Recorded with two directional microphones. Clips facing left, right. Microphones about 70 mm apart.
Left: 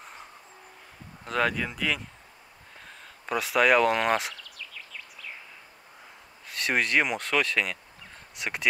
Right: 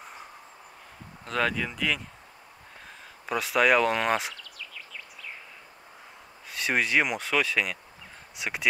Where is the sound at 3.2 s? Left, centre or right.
Centre.